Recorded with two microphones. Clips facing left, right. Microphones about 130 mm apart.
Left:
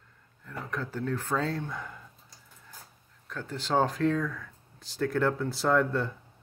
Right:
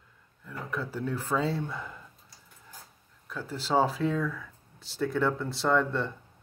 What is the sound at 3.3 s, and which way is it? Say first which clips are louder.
Speech: right 1 dB; 5° right (ahead or behind).